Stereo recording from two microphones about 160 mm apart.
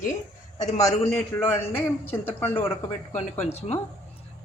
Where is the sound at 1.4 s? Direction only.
15° left (ahead or behind).